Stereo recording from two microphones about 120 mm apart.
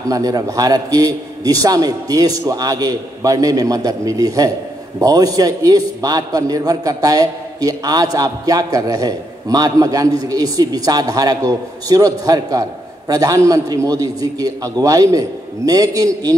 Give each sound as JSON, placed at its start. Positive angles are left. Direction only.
{"t": 0.1, "sound": "a man's voice", "side_deg": -30}